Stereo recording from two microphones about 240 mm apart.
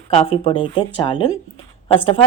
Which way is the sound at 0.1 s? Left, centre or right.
Left.